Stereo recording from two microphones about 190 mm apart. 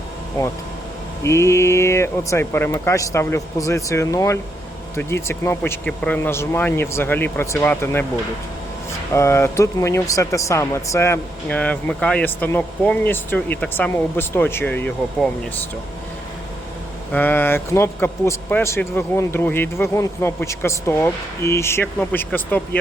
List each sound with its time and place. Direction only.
1.2 s speech: 15° left (ahead or behind)
9.1 s speech: 15° left (ahead or behind)
17.1 s speech: 10° left (ahead or behind)